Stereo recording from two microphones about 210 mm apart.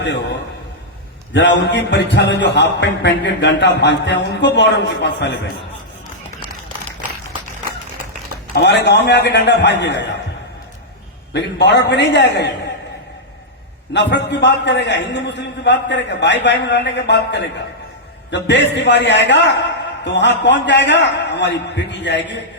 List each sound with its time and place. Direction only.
0.0 s a man's voice: 55° left (ahead or behind)
1.4 s speech: 55° left (ahead or behind)
8.5 s speech: 55° left (ahead or behind)
11.3 s speech: 55° left (ahead or behind)
13.9 s speech: 55° left (ahead or behind)